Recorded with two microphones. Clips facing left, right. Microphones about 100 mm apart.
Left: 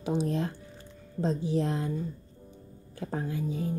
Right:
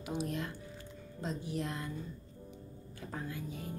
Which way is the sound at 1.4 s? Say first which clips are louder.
Left 9 dB; 90° left.